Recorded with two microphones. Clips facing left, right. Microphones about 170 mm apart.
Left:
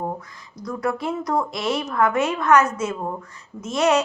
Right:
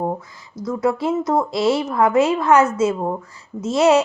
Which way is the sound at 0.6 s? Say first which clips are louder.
Right 5 dB; 25° right (ahead or behind).